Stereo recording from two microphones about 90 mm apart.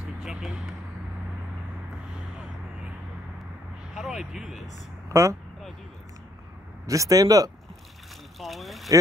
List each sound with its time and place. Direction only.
0.2 s vehicle: 5° right (ahead or behind)
3.9 s speech: 5° right (ahead or behind)
5.1 s speech: 35° right (ahead or behind)
6.9 s speech: 40° right (ahead or behind)
8.4 s a sound: centre (ahead or behind)